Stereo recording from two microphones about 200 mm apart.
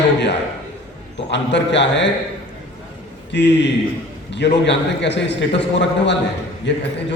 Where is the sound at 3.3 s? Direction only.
60° left (ahead or behind).